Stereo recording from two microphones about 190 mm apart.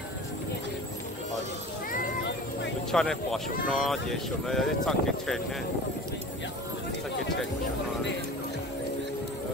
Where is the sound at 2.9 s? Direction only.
5° left (ahead or behind).